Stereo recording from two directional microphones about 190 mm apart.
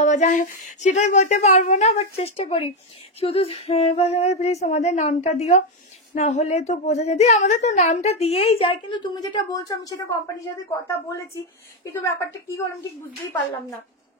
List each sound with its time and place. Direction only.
0.0 s a woman's voice: 40° left (ahead or behind); by 10.5 s 20° left (ahead or behind)
11.8 s a woman's voice: 15° left (ahead or behind)